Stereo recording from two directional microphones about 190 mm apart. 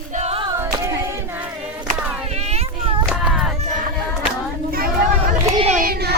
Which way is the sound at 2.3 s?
35° right (ahead or behind).